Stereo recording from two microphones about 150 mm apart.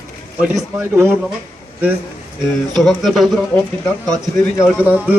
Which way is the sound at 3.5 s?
15° left (ahead or behind).